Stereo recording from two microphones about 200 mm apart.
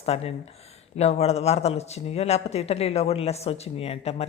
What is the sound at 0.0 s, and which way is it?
Speech, 30° left (ahead or behind).